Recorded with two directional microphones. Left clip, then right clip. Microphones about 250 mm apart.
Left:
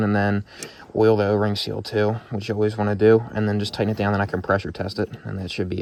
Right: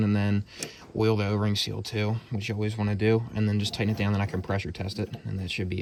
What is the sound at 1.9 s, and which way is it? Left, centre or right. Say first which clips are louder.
Speech: left 10 dB; left.